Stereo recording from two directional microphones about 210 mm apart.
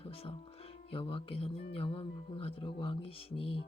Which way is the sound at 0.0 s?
30° left (ahead or behind).